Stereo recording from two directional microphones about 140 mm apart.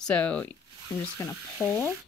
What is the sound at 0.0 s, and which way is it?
Speech, 10° left (ahead or behind).